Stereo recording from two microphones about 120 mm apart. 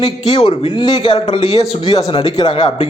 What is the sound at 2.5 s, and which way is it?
Speech, 50° left (ahead or behind).